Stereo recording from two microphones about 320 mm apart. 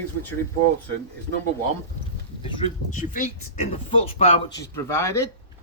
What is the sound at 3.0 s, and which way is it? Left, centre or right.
A man's voice, left.